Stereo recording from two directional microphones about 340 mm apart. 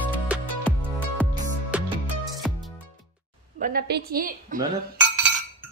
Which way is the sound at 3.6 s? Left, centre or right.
Right.